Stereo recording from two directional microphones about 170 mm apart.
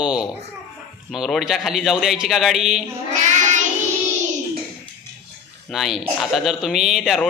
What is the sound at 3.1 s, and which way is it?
Child singing, 45° right (ahead or behind).